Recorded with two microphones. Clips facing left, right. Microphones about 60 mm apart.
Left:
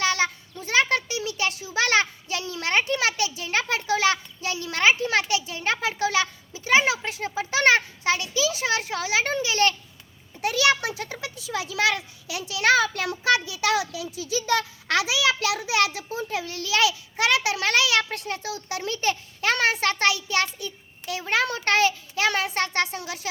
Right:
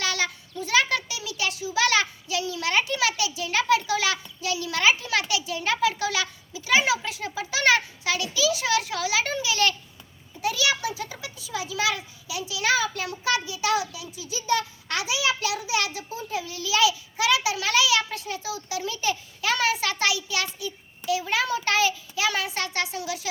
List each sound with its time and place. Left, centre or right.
0.0 s a child's voice: left
10.4 s a child's voice: left